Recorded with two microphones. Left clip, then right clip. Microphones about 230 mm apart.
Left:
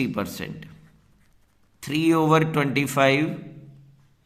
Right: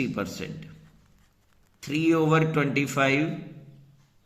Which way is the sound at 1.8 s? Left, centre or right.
Left.